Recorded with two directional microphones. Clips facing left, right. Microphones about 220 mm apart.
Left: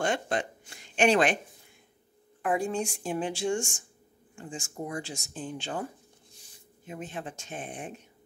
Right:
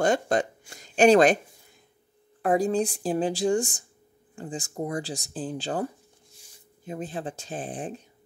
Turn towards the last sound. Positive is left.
turn(degrees=-35)  # may be behind; listen again after turning